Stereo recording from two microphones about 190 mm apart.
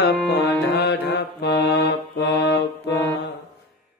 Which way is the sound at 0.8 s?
60° left (ahead or behind).